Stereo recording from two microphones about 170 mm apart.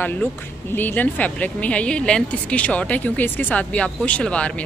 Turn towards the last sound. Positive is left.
turn(degrees=5)  # may be behind; listen again after turning